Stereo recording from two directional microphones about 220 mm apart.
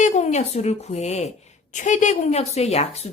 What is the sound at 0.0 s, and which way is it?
A woman's voice, 30° left (ahead or behind).